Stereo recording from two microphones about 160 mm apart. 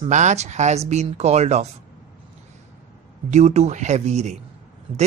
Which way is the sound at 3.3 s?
45° right (ahead or behind).